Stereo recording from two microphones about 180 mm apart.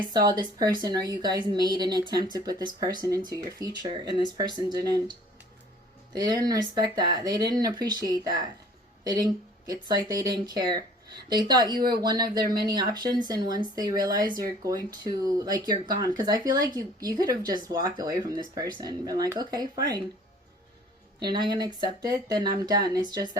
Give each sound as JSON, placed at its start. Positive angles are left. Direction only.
{"t": 0.1, "sound": "speech", "side_deg": -25}
{"t": 6.1, "sound": "speech", "side_deg": -20}
{"t": 21.2, "sound": "speech", "side_deg": -25}